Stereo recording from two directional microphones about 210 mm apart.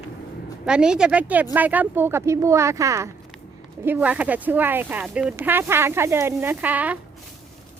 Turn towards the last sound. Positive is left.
turn(degrees=-5)  # may be behind; listen again after turning